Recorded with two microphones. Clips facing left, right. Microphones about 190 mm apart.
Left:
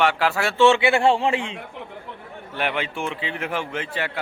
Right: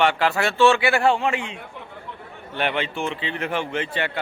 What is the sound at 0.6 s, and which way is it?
Speech, 20° left (ahead or behind).